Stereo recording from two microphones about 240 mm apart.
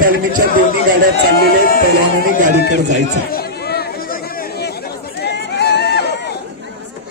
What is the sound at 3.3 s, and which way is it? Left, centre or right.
Chatter, left.